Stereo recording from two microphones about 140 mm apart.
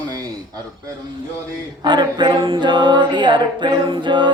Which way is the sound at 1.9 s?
30° right (ahead or behind).